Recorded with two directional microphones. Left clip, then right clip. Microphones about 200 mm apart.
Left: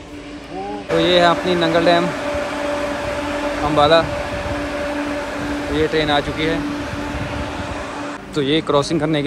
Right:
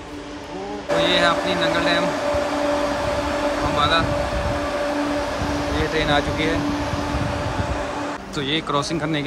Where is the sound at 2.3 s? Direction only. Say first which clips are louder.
Right 1 dB; 55° right (ahead or behind).